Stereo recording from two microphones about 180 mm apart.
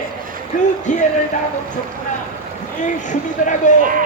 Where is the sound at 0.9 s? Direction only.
40° left (ahead or behind).